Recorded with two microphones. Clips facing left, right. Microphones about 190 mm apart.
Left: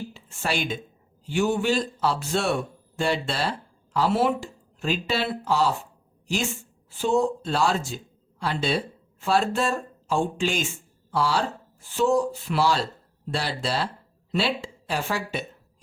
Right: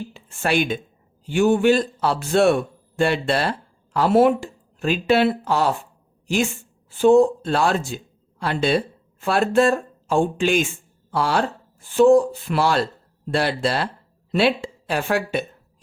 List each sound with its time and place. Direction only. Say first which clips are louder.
0.1 s speech: right 9 dB; 55° right (ahead or behind)
6.9 s speech: right 9 dB; 55° right (ahead or behind)